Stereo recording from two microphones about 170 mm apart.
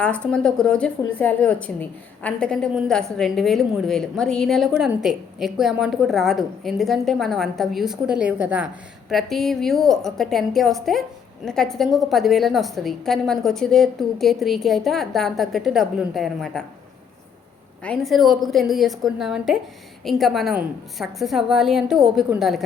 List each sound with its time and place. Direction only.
0.0 s a woman's voice: 5° left (ahead or behind)
17.8 s a woman's voice: centre (ahead or behind)